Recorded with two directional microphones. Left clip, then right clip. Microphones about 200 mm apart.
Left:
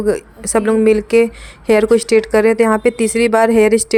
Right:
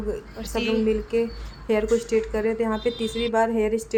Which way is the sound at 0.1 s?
50° left (ahead or behind).